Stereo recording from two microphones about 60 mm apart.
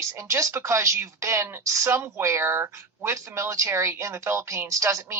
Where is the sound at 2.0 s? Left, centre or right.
Right.